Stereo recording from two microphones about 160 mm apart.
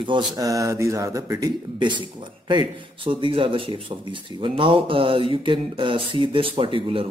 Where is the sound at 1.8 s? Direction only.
30° right (ahead or behind).